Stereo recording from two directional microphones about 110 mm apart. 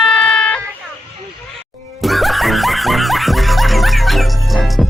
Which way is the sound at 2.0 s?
Centre (ahead or behind).